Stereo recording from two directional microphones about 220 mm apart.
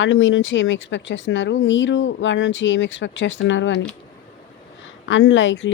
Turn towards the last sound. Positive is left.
turn(degrees=55)  # may be behind; listen again after turning